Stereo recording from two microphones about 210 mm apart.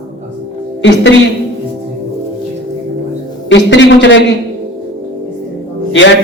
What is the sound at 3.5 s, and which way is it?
Speech, 60° left (ahead or behind).